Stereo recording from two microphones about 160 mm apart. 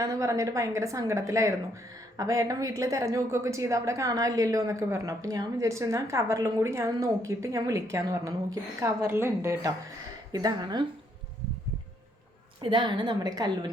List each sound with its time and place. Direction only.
0.0 s a woman's voice: 20° right (ahead or behind)
12.6 s a woman's voice: 30° right (ahead or behind)